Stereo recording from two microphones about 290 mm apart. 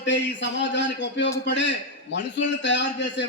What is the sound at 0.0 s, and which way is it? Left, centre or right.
A man's voice, left.